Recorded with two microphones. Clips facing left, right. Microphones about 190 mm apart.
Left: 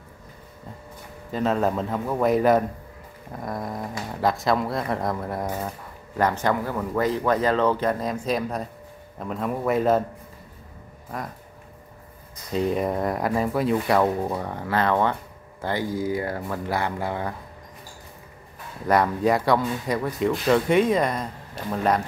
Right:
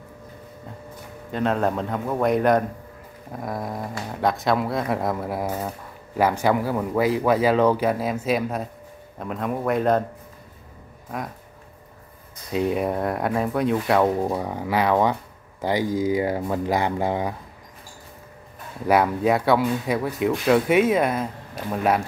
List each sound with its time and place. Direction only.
1.3 s speech: centre (ahead or behind)
12.5 s speech: 5° right (ahead or behind)
14.2 s speech: 10° right (ahead or behind)
18.9 s speech: 5° right (ahead or behind)